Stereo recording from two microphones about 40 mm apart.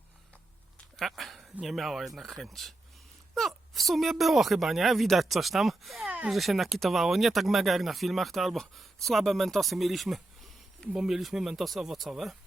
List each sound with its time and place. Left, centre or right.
0.9 s a sound: centre
1.6 s speech: centre
10.9 s speech: centre
11.2 s speech: centre